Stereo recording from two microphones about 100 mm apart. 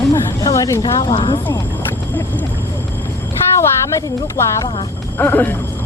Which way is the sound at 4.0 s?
35° left (ahead or behind).